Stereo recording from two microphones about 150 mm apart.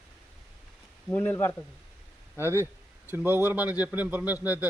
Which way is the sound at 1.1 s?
10° left (ahead or behind).